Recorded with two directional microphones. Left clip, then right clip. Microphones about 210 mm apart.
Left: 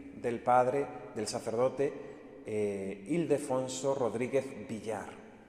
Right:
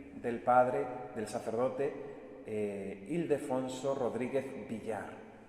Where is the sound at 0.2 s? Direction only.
40° left (ahead or behind).